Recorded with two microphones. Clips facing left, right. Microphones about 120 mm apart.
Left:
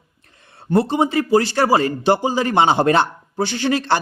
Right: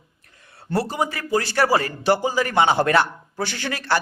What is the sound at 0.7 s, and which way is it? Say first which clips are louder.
Speech: left 6 dB; 25° left (ahead or behind).